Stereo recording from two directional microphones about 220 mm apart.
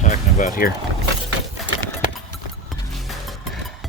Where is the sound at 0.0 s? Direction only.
35° left (ahead or behind).